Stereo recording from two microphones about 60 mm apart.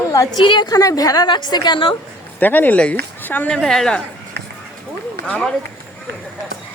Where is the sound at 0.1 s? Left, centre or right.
Left.